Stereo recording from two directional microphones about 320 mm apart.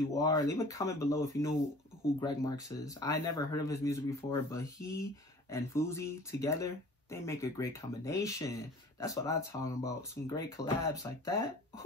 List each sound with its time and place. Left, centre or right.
0.1 s speech: centre